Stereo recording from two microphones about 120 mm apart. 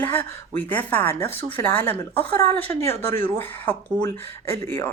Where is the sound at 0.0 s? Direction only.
20° left (ahead or behind).